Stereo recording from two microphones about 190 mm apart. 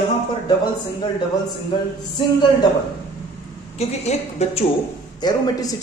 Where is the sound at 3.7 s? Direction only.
35° left (ahead or behind).